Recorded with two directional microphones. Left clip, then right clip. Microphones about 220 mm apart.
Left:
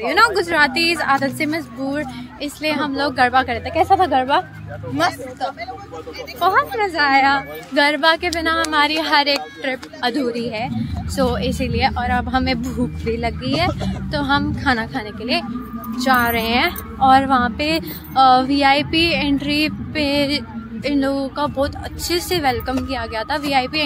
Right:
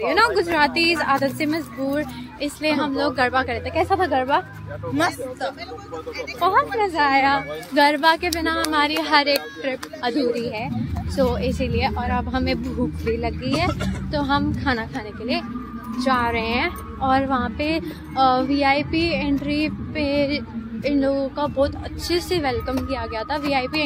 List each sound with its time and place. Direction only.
0.0 s a woman's voice: 5° left (ahead or behind); by 4.5 s 25° left (ahead or behind)
4.9 s a woman's voice: 5° right (ahead or behind); by 10.1 s 15° left (ahead or behind)
11.1 s a woman's voice: 15° left (ahead or behind)